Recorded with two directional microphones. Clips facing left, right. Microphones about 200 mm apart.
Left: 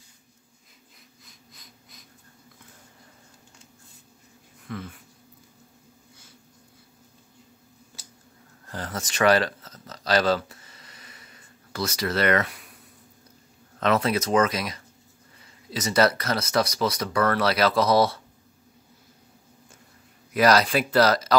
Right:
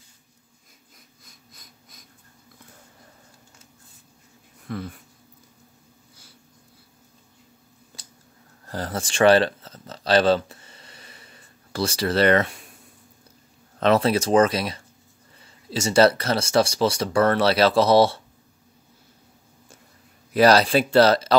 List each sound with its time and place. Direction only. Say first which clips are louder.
0.9 s wheeze: even; 45° right (ahead or behind)
4.6 s speech: right 4 dB; 35° right (ahead or behind)
8.6 s a sound: right 4 dB; 35° right (ahead or behind)
13.7 s speech: right 4 dB; 30° right (ahead or behind)
20.3 s speech: right 3 dB; 30° right (ahead or behind)